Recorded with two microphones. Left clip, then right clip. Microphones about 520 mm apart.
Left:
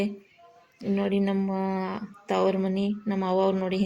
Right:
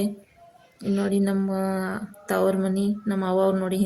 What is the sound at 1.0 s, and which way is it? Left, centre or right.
A woman's voice, right.